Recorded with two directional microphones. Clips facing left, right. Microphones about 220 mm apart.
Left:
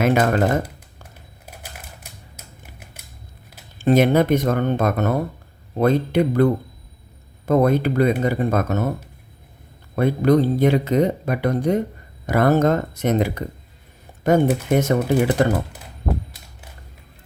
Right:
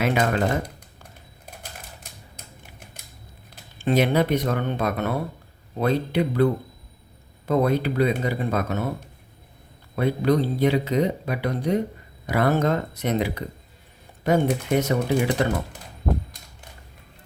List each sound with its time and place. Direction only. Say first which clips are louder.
0.0 s speech: left 4 dB; 45° left (ahead or behind)
2.3 s typewriter: left 1 dB; 5° left (ahead or behind)
3.8 s speech: left 5 dB; 45° left (ahead or behind)
9.9 s speech: left 4 dB; 50° left (ahead or behind)